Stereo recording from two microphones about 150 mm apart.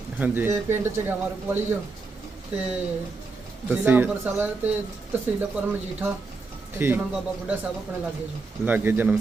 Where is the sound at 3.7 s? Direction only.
10° right (ahead or behind).